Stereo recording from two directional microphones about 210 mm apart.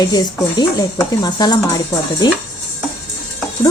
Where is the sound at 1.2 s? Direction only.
20° left (ahead or behind).